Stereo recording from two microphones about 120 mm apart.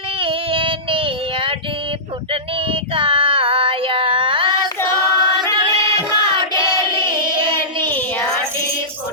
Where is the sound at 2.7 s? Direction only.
50° right (ahead or behind).